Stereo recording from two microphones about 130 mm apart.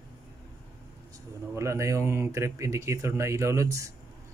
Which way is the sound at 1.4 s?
20° right (ahead or behind).